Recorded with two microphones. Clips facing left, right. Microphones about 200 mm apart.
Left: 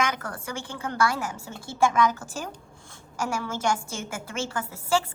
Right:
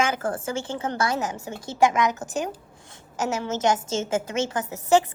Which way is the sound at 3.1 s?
20° right (ahead or behind).